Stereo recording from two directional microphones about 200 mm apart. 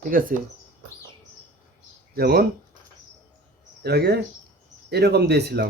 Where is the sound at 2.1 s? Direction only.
50° right (ahead or behind).